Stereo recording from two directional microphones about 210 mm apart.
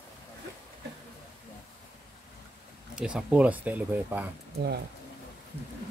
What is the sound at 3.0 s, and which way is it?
Speech, 5° right (ahead or behind).